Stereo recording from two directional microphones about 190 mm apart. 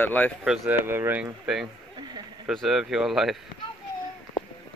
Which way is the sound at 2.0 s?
20° right (ahead or behind).